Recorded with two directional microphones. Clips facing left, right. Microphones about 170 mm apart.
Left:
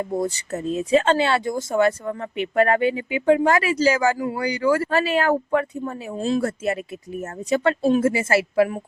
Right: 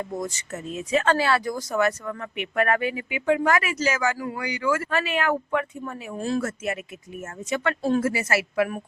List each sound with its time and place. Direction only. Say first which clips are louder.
0.1 s speech: left 6 dB; 30° left (ahead or behind)
6.1 s speech: left 3 dB; 20° left (ahead or behind)
7.2 s speech: left 6 dB; 35° left (ahead or behind)
7.8 s speech: left 4 dB; 20° left (ahead or behind)